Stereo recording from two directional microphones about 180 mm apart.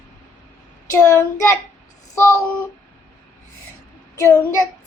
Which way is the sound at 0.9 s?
15° left (ahead or behind).